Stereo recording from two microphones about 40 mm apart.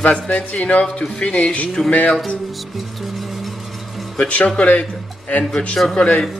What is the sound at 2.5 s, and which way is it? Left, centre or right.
Music, centre.